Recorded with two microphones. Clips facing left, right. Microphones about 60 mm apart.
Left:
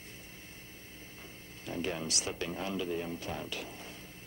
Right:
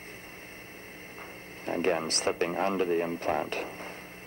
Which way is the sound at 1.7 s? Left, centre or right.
Right.